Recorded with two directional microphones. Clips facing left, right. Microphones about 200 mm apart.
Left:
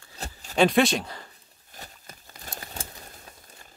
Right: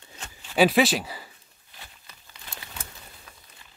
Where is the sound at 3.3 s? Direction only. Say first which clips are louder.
Left 3 dB; 30° left (ahead or behind).